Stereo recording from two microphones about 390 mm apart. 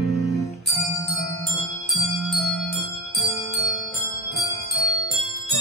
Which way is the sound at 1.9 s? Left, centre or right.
Centre.